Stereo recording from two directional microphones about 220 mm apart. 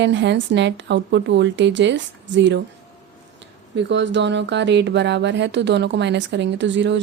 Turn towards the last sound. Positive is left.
turn(degrees=-55)  # may be behind; listen again after turning